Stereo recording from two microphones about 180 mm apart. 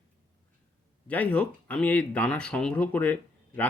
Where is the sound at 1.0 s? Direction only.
10° left (ahead or behind).